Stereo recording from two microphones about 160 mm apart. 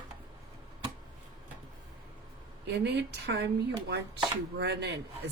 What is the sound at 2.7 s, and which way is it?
Speech, 90° right.